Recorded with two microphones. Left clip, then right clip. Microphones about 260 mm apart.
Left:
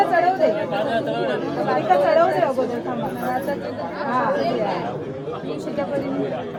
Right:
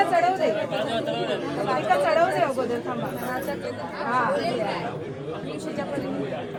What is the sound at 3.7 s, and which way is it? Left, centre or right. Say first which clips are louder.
Speech: left 3 dB; left.